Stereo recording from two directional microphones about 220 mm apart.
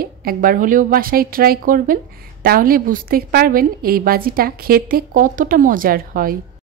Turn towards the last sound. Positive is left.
turn(degrees=-40)  # may be behind; listen again after turning